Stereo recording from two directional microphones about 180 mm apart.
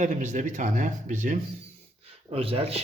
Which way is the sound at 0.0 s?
40° right (ahead or behind).